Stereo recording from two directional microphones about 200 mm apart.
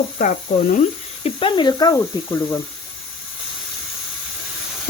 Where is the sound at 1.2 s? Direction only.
25° left (ahead or behind).